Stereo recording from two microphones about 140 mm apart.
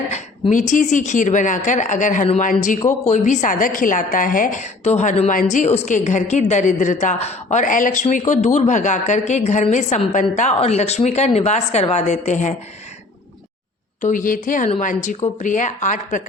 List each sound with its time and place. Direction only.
0.5 s a woman's voice: 65° left (ahead or behind)
4.8 s speech: 50° left (ahead or behind)
5.3 s a woman's voice: 70° left (ahead or behind); by 7.6 s 55° left (ahead or behind)
7.6 s a woman's voice: 70° left (ahead or behind)
8.3 s a woman's voice: 60° left (ahead or behind)
14.0 s a woman's voice: 65° left (ahead or behind)